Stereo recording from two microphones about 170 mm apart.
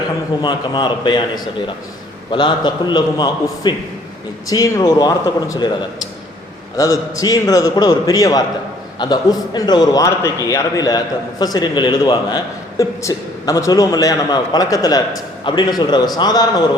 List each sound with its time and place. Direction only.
0.4 s a man's voice: 25° left (ahead or behind)
2.3 s a man's voice: 25° left (ahead or behind)